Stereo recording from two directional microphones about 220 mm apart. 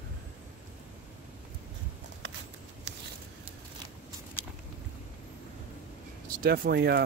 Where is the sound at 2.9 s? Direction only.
55° right (ahead or behind).